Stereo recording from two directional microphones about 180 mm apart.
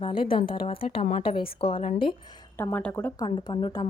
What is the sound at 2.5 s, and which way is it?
Speech, 10° left (ahead or behind).